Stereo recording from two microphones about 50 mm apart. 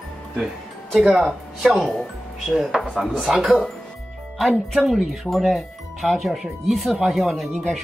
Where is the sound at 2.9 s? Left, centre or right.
Centre.